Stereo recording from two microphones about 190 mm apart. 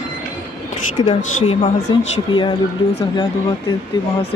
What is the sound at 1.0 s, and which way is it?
A woman's voice, 30° left (ahead or behind).